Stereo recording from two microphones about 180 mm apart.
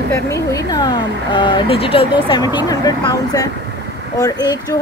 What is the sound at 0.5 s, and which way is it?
Speech, 25° left (ahead or behind).